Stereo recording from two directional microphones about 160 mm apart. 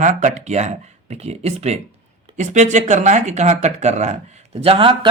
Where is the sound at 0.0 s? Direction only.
50° right (ahead or behind).